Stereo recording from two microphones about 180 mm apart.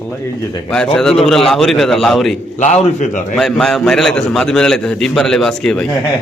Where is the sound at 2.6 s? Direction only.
40° left (ahead or behind).